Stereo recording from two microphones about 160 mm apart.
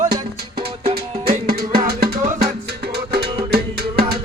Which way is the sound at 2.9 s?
85° right.